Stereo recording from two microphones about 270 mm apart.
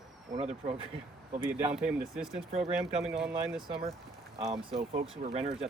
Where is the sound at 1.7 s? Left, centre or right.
Centre.